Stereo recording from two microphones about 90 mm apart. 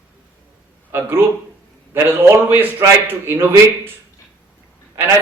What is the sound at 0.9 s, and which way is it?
A man's voice, 25° right (ahead or behind).